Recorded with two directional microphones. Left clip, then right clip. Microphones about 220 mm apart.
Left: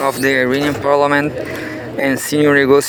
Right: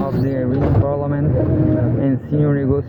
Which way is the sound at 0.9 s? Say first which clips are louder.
Left 8 dB; 60° left (ahead or behind).